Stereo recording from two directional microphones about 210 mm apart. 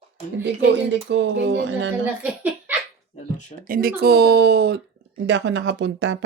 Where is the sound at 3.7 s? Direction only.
45° right (ahead or behind).